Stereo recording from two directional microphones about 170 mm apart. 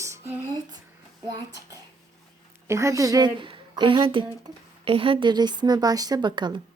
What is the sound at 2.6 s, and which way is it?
A woman's voice, 15° right (ahead or behind).